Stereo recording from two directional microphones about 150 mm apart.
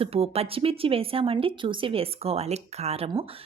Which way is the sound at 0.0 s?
40° right (ahead or behind).